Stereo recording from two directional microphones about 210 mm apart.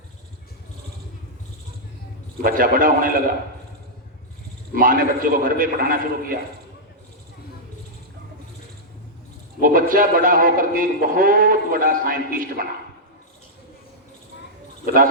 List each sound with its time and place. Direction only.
2.4 s speech: 40° right (ahead or behind)
4.7 s speech: 40° right (ahead or behind)
9.6 s speech: 40° right (ahead or behind)
14.9 s speech: 40° right (ahead or behind)